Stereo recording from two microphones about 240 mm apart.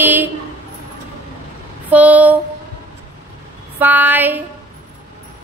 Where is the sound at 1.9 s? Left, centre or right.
Centre.